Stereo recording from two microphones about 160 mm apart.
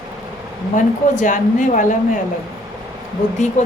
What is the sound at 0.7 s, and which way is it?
A woman's voice, 55° left (ahead or behind).